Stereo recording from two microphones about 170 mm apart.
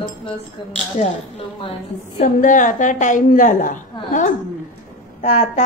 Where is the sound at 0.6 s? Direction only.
25° left (ahead or behind).